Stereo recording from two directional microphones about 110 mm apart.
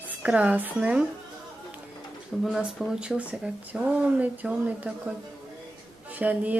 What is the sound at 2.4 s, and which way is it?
Speech, centre (ahead or behind).